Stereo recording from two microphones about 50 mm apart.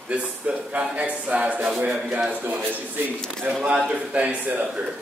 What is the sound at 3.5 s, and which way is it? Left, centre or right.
Speech, right.